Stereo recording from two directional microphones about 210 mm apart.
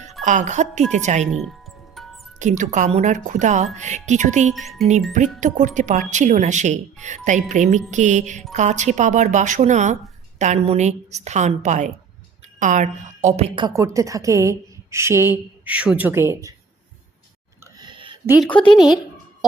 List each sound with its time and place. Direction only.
0.3 s speech: 35° right (ahead or behind)
1.3 s speech: centre (ahead or behind)
2.0 s music: centre (ahead or behind)
2.4 s speech: 35° right (ahead or behind)
4.5 s speech: centre (ahead or behind)
5.4 s a woman's voice: 35° right (ahead or behind); by 16.6 s 15° right (ahead or behind)
17.7 s a sound: 20° right (ahead or behind)
18.7 s speech: centre (ahead or behind)